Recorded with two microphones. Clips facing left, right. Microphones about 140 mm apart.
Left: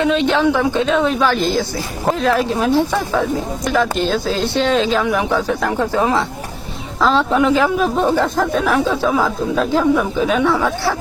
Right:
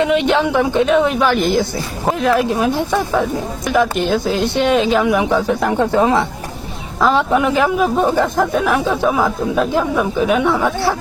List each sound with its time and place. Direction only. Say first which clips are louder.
0.0 s speech: even; 15° right (ahead or behind)